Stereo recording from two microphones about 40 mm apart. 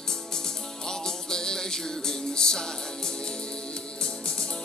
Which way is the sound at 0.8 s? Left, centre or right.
Centre.